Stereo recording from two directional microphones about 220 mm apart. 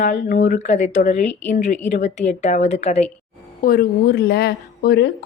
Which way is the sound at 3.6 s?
40° left (ahead or behind).